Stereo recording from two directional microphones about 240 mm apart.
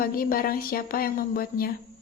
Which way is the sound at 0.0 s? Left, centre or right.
Left.